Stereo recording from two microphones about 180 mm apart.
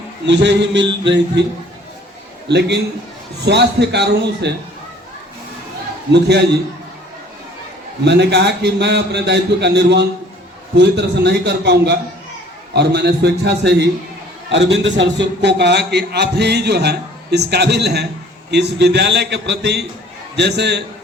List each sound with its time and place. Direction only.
0.3 s a man's voice: 75° right (ahead or behind)
2.5 s a man's voice: 70° right (ahead or behind)
6.1 s a man's voice: 70° right (ahead or behind)
8.0 s a man's voice: 70° right (ahead or behind)